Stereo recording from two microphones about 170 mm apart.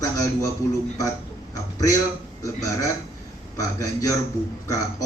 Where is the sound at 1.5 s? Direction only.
20° left (ahead or behind).